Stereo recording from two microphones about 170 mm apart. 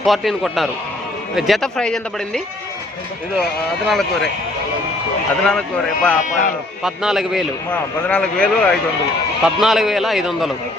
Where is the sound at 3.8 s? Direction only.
Centre (ahead or behind).